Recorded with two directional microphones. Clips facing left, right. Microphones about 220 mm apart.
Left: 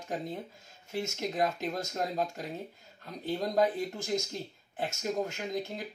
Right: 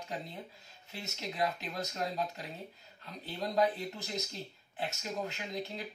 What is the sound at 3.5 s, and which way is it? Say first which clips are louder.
Speech: left 1 dB; 45° left (ahead or behind).